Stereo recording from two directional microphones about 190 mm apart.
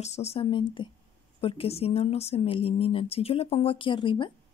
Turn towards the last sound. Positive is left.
turn(degrees=25)  # may be behind; listen again after turning